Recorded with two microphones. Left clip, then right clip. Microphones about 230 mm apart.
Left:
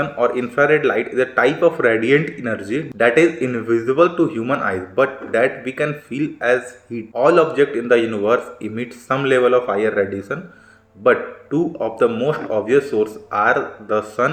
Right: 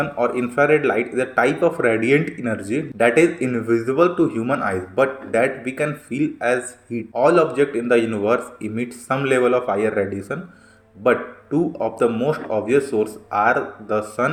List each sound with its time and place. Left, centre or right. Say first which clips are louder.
0.0 s a man's voice: left 2 dB; right